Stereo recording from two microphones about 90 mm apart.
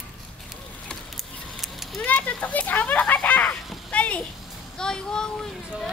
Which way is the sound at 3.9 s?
15° left (ahead or behind).